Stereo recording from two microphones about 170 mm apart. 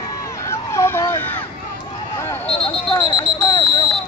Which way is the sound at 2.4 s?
35° left (ahead or behind).